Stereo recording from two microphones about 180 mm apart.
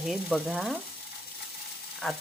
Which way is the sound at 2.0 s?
5° left (ahead or behind).